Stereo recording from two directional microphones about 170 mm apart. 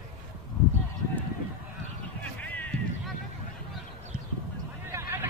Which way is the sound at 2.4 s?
10° left (ahead or behind).